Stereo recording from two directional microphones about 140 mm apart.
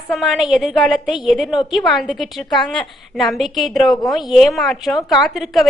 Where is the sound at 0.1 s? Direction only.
Centre (ahead or behind).